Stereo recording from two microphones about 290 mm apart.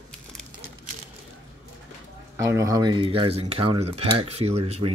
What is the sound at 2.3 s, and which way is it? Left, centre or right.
Speech, centre.